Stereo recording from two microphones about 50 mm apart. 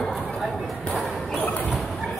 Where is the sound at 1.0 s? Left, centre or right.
Left.